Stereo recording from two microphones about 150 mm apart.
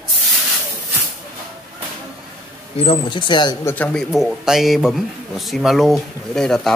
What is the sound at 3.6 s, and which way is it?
Speech, 10° left (ahead or behind).